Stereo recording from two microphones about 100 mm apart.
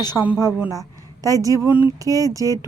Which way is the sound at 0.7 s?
35° right (ahead or behind).